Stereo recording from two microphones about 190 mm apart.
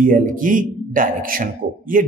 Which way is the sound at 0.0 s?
45° right (ahead or behind).